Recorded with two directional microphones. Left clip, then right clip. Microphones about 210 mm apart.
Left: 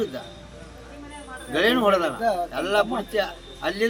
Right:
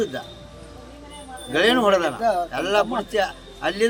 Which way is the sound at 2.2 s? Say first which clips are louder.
Right 3 dB; 15° left (ahead or behind).